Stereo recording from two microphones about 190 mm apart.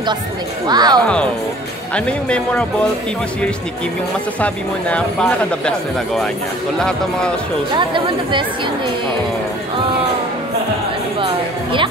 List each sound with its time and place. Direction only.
0.7 s speech: 20° right (ahead or behind)
1.0 s speech: 5° left (ahead or behind)
4.4 s speech: 5° left (ahead or behind)
7.7 s speech: 25° right (ahead or behind)
11.1 s music: 25° right (ahead or behind)